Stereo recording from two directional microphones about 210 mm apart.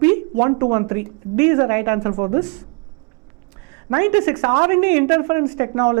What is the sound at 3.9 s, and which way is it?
Speech, 15° right (ahead or behind).